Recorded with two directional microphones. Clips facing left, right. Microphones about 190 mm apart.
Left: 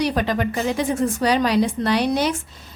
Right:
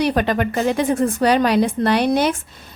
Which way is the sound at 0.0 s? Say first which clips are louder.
Right 3 dB; 55° right (ahead or behind).